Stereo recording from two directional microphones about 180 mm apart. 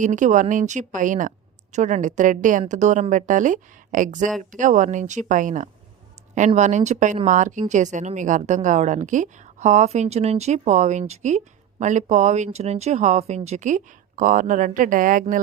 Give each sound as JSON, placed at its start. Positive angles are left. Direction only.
{"t": 0.0, "sound": "a woman's voice", "side_deg": -45}